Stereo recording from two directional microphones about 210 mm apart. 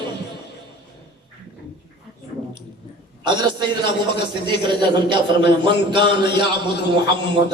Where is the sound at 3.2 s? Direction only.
20° right (ahead or behind).